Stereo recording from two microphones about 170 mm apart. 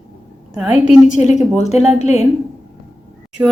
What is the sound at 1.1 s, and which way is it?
A woman's voice, 45° left (ahead or behind).